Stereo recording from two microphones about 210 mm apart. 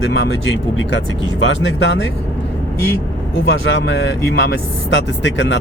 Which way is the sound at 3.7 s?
60° left (ahead or behind).